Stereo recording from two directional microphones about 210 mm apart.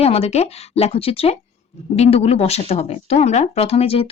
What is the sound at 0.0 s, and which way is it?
A woman's voice, 30° left (ahead or behind).